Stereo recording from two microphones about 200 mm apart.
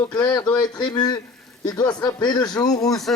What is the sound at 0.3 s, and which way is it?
Speech, 20° left (ahead or behind).